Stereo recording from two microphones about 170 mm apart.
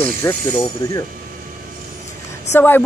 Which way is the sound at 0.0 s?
15° left (ahead or behind).